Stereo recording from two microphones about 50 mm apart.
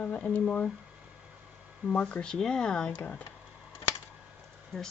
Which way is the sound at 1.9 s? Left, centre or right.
Left.